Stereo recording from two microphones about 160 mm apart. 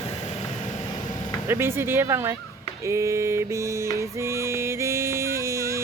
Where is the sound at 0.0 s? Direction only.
40° left (ahead or behind).